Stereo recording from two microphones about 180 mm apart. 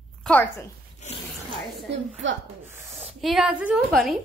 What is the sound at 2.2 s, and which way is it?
Speech, 90° right.